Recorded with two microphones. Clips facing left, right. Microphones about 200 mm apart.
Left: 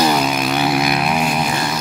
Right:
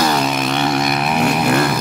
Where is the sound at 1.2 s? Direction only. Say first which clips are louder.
Right 5 dB; 65° right (ahead or behind).